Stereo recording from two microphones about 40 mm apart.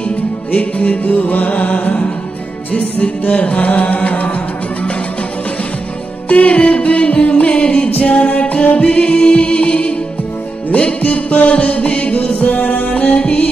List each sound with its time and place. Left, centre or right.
0.5 s music: left
6.2 s music: left
7.9 s music: left
12.4 s music: left
12.9 s music: left